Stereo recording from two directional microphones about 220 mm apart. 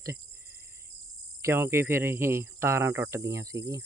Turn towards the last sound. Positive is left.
turn(degrees=-15)  # may be behind; listen again after turning